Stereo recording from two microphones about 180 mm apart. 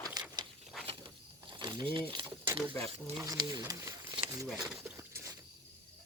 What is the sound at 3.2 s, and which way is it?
Speech, 20° right (ahead or behind).